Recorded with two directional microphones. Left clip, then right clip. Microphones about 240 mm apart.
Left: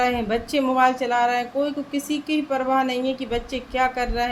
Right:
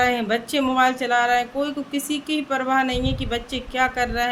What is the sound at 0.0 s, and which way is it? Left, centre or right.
Speech, centre.